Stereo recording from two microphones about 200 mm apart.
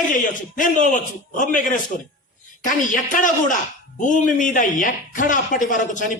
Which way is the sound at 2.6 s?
40° left (ahead or behind).